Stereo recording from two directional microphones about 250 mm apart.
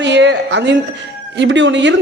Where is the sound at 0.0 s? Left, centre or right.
Right.